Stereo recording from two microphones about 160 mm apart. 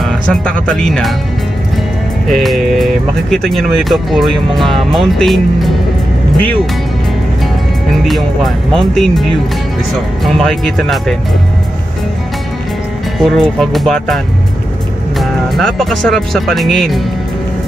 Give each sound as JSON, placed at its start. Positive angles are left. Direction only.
{"t": 0.0, "sound": "speech", "side_deg": 5}
{"t": 2.2, "sound": "speech", "side_deg": 0}
{"t": 8.0, "sound": "speech", "side_deg": 0}
{"t": 13.2, "sound": "speech", "side_deg": 0}